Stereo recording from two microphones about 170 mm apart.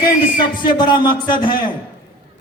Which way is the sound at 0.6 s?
25° left (ahead or behind).